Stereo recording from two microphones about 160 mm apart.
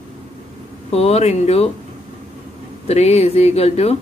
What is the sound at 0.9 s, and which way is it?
Speech, 40° left (ahead or behind).